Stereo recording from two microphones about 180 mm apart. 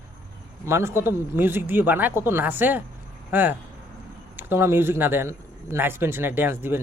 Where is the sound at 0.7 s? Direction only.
15° right (ahead or behind).